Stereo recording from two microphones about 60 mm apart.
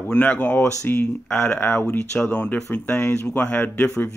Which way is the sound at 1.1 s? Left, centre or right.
Centre.